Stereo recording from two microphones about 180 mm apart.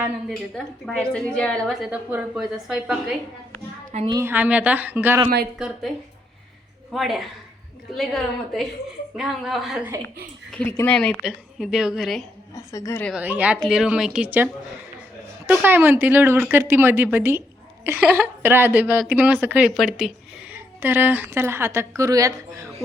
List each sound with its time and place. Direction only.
0.5 s a woman's voice: 5° left (ahead or behind)
6.9 s a woman's voice: centre (ahead or behind)
12.5 s a woman's voice: 15° left (ahead or behind)
13.1 s a woman's voice: 10° right (ahead or behind)